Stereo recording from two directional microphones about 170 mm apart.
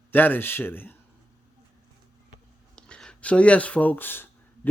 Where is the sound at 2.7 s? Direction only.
5° left (ahead or behind).